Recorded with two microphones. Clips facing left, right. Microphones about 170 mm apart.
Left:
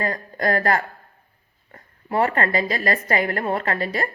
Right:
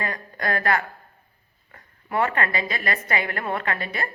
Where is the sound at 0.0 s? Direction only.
35° left (ahead or behind).